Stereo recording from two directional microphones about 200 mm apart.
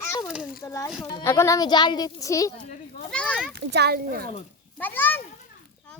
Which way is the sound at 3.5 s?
55° right (ahead or behind).